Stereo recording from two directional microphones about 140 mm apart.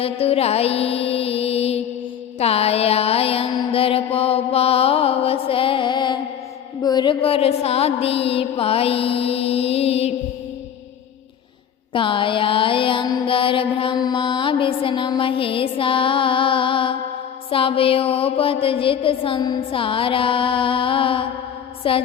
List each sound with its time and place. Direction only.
0.0 s mantra: 45° left (ahead or behind)
11.9 s mantra: 35° left (ahead or behind)